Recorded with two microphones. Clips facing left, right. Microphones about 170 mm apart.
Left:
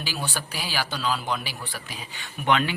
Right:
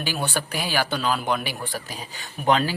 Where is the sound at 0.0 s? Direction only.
55° right (ahead or behind).